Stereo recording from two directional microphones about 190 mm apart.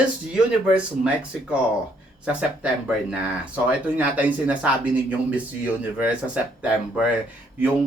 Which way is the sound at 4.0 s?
10° right (ahead or behind).